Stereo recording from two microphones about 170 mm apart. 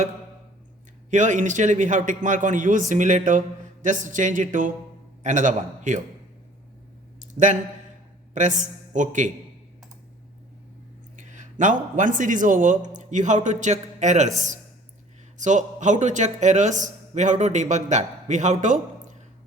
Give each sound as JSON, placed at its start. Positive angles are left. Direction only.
{"t": 1.1, "sound": "a man's voice", "side_deg": -45}
{"t": 7.2, "sound": "a sound", "side_deg": -45}
{"t": 8.3, "sound": "a man's voice", "side_deg": -45}
{"t": 11.2, "sound": "a man's voice", "side_deg": -45}